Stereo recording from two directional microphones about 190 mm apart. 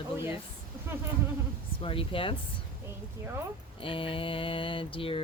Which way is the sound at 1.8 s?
30° left (ahead or behind).